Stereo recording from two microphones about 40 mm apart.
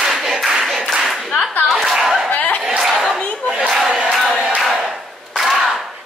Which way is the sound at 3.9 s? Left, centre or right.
Right.